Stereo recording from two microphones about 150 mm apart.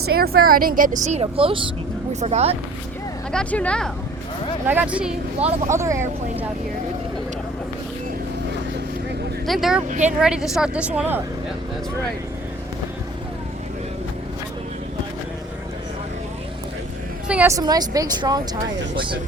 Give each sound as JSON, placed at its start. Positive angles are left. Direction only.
{"t": 0.2, "sound": "speech", "side_deg": -85}
{"t": 3.3, "sound": "speech", "side_deg": 10}
{"t": 4.6, "sound": "speech", "side_deg": -10}
{"t": 5.6, "sound": "speech", "side_deg": -20}
{"t": 9.5, "sound": "speech", "side_deg": 0}
{"t": 9.9, "sound": "speech", "side_deg": -55}
{"t": 10.2, "sound": "speech", "side_deg": -5}
{"t": 17.2, "sound": "a woman's voice", "side_deg": -10}
{"t": 17.5, "sound": "speech", "side_deg": -25}